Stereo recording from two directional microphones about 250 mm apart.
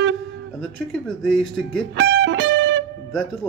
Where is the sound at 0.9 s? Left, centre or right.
Centre.